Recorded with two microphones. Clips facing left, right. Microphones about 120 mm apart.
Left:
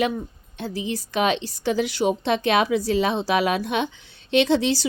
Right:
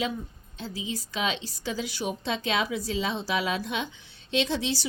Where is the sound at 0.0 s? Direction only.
65° left (ahead or behind).